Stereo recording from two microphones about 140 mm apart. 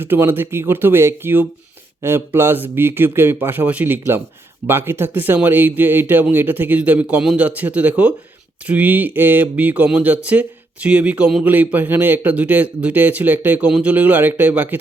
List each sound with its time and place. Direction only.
0.0 s speech: 15° right (ahead or behind)